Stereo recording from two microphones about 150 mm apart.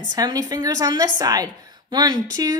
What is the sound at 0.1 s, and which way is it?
A woman's voice, 25° right (ahead or behind).